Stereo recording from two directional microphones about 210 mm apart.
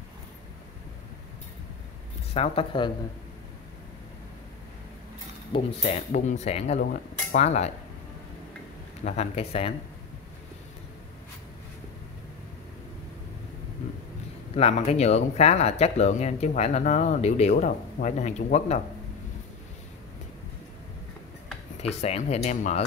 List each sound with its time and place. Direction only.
2.3 s speech: 30° left (ahead or behind)
5.5 s speech: 30° left (ahead or behind)
9.0 s speech: 30° left (ahead or behind)
14.5 s speech: 30° left (ahead or behind)
21.8 s speech: 30° left (ahead or behind)